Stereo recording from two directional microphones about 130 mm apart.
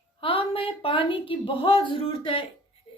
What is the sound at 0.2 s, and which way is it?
A woman's voice, 45° left (ahead or behind).